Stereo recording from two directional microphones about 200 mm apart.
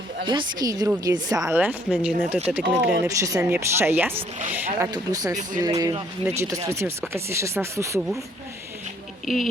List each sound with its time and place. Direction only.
0.3 s a woman's voice: 20° right (ahead or behind)
9.2 s speech: centre (ahead or behind)